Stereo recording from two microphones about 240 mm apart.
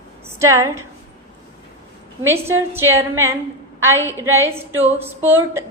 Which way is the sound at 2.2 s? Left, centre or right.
Centre.